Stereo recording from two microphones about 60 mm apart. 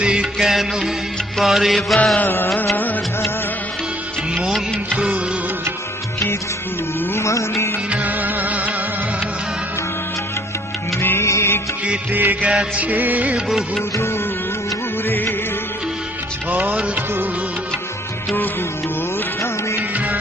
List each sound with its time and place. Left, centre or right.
0.0 s music: centre
2.1 s music: left
2.7 s music of bollywood: left
4.9 s music of bollywood: right
7.1 s music: left
7.9 s music of bollywood: right
11.2 s music: left
12.1 s music: right
12.5 s music: centre
15.0 s music: left
16.5 s music: right